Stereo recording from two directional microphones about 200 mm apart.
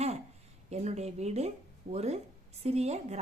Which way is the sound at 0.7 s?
35° right (ahead or behind).